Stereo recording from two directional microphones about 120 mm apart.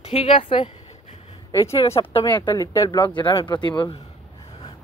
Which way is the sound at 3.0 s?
40° left (ahead or behind).